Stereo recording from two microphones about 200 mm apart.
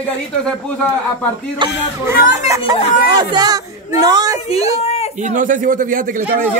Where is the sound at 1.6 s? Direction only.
15° right (ahead or behind).